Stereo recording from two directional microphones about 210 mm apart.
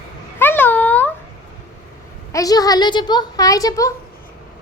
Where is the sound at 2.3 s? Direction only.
15° left (ahead or behind).